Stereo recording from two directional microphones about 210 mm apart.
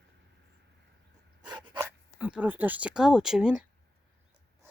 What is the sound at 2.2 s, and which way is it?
Speech, 5° right (ahead or behind).